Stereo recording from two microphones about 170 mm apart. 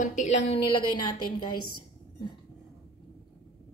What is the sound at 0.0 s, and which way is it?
Speech, 45° left (ahead or behind).